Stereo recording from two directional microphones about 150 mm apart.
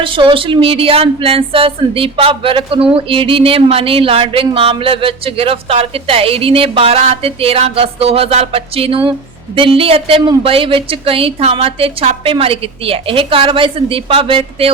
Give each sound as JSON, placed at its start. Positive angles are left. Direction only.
{"t": 0.0, "sound": "speech", "side_deg": -35}